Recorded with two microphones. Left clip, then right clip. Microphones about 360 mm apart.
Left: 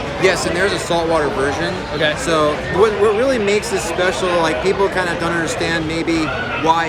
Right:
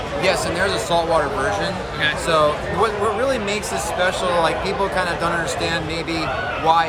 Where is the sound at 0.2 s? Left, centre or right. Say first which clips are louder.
Left 3 dB; centre.